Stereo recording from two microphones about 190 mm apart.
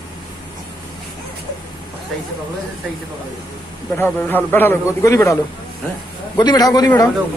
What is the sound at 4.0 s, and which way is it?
A man's voice, 10° left (ahead or behind).